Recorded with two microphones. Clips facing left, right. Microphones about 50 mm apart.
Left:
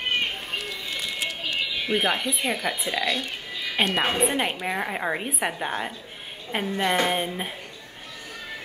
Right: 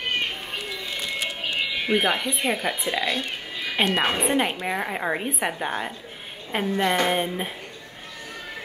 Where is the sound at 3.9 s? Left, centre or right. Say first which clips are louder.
Right 1 dB; centre.